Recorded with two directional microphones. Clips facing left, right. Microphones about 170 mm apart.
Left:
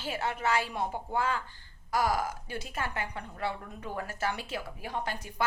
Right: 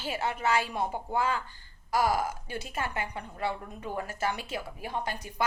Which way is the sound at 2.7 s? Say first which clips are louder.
Right 2 dB; 20° right (ahead or behind).